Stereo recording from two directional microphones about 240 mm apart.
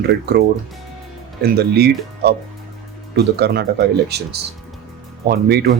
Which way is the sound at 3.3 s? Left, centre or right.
Right.